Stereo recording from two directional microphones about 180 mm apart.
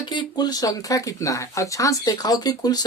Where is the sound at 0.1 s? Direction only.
25° left (ahead or behind).